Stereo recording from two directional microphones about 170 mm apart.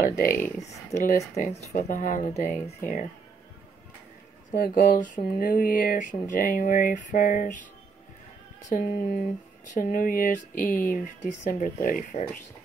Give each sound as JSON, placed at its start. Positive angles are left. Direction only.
{"t": 0.0, "sound": "speech", "side_deg": 55}
{"t": 0.7, "sound": "speech", "side_deg": 45}
{"t": 4.5, "sound": "speech", "side_deg": 55}
{"t": 8.6, "sound": "speech", "side_deg": 50}